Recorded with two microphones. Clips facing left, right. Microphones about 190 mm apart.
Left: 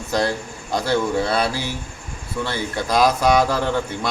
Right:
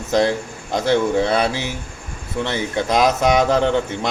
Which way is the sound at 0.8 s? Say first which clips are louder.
Right 4 dB; 20° right (ahead or behind).